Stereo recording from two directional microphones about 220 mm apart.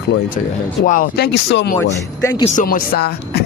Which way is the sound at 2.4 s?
35° left (ahead or behind).